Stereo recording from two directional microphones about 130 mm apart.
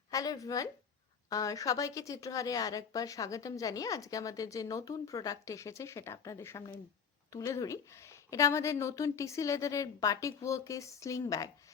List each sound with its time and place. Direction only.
0.1 s a woman's voice: 25° left (ahead or behind)